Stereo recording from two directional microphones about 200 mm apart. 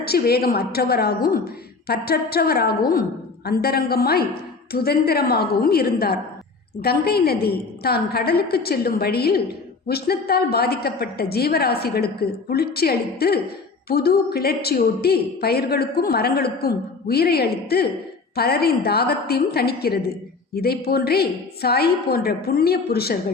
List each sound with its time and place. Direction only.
0.0 s speech: 50° left (ahead or behind)